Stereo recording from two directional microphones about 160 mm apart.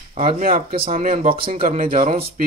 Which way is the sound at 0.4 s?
60° right (ahead or behind).